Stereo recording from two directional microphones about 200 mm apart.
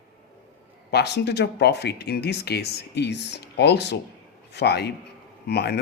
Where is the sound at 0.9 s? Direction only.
55° left (ahead or behind).